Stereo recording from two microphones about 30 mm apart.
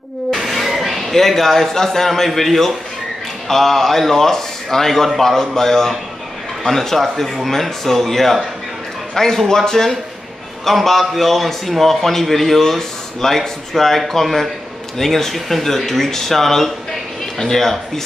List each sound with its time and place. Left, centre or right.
0.5 s speech: centre
2.2 s a man's voice: centre
10.6 s a man's voice: centre